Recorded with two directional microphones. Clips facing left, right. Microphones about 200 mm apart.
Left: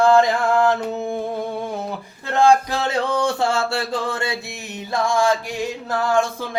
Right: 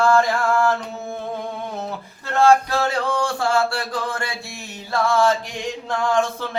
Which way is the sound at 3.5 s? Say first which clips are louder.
Right 1 dB; 25° left (ahead or behind).